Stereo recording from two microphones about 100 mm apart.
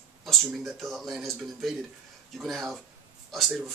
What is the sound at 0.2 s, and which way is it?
Speech, centre (ahead or behind).